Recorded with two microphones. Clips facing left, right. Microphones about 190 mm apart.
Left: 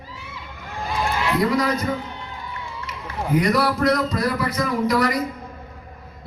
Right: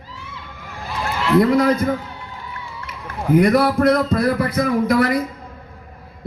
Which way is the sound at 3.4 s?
50° right (ahead or behind).